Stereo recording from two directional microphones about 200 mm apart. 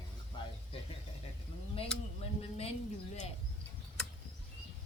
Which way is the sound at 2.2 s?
30° left (ahead or behind).